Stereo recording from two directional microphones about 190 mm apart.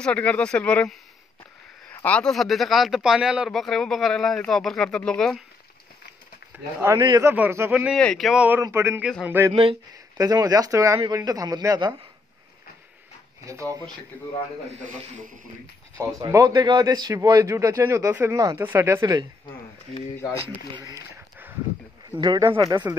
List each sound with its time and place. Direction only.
0.0 s speech: 5° left (ahead or behind)
6.5 s speech: 15° right (ahead or behind)
9.5 s speech: 30° right (ahead or behind)
14.7 s a man's voice: 40° right (ahead or behind)
16.0 s speech: 15° right (ahead or behind)
20.7 s speech: 15° right (ahead or behind)
21.1 s a sound: 10° right (ahead or behind)
22.2 s speech: 20° right (ahead or behind)